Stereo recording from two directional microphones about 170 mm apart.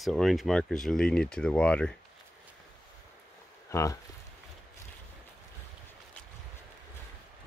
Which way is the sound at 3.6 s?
15° left (ahead or behind).